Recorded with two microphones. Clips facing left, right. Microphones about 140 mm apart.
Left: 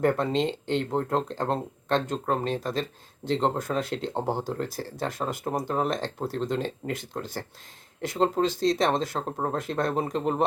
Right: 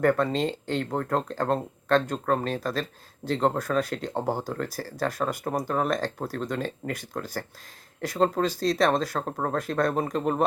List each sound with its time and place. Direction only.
0.0 s speech: 20° left (ahead or behind)